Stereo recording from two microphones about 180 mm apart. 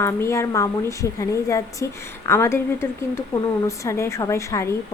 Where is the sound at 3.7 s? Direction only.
15° left (ahead or behind).